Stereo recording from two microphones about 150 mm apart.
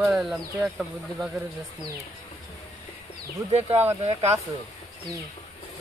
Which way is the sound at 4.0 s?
45° right (ahead or behind).